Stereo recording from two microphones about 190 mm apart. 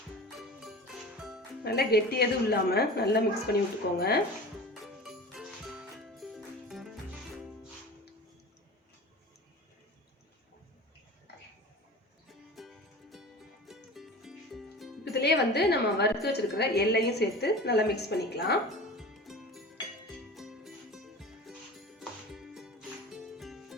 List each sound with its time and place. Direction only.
0.3 s music: centre (ahead or behind)
1.6 s a woman's voice: 55° left (ahead or behind)
4.7 s music: centre (ahead or behind)
12.3 s music: centre (ahead or behind)
15.1 s a sound: 60° left (ahead or behind)
16.2 s a woman's voice: 60° left (ahead or behind)
18.7 s music: centre (ahead or behind)